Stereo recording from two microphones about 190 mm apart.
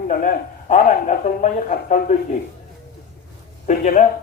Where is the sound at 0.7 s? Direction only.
40° left (ahead or behind).